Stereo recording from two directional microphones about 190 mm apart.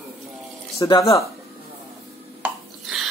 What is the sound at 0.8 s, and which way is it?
Speech, 20° left (ahead or behind).